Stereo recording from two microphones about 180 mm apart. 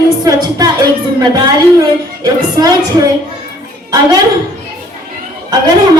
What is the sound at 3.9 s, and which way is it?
Speech, 20° right (ahead or behind).